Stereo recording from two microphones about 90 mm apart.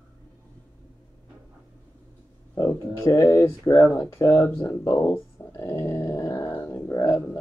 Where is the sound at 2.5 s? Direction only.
35° left (ahead or behind).